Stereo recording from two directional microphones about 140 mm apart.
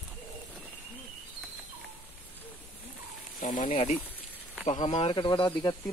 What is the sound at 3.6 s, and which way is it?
Speech, 60° left (ahead or behind).